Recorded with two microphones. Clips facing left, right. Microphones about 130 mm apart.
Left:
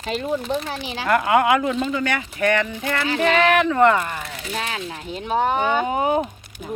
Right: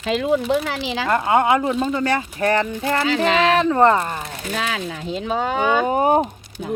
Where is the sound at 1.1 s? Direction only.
25° right (ahead or behind).